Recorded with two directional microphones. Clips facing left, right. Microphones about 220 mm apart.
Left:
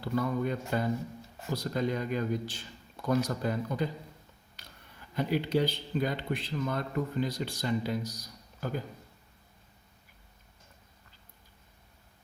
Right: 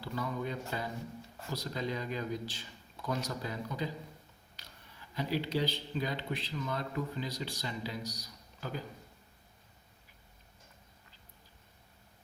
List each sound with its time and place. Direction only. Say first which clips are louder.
0.0 s speech: left 7 dB; 55° left (ahead or behind)